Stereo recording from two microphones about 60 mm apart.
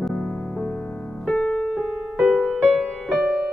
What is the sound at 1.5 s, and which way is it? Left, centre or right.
Piano, centre.